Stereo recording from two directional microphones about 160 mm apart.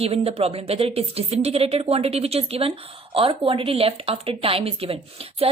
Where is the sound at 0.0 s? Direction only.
40° right (ahead or behind).